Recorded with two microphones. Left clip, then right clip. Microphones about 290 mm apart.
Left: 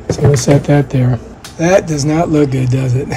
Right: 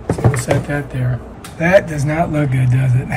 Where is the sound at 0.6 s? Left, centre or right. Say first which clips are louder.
Left 9 dB; centre.